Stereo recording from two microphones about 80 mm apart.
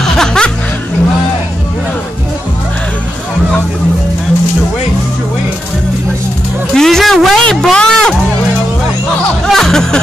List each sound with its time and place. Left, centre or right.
0.0 s music: centre
6.7 s a sound: centre
9.5 s music: centre